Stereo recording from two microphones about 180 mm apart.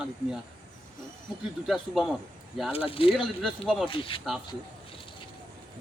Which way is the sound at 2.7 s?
30° left (ahead or behind).